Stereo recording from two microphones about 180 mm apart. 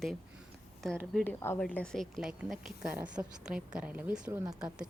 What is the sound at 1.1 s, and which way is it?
A woman's voice, 10° left (ahead or behind).